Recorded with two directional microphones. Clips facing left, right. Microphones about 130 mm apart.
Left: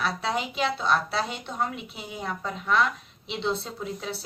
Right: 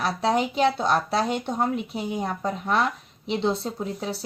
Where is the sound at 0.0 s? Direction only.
35° right (ahead or behind).